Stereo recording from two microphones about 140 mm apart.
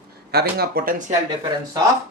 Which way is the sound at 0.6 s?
90° right.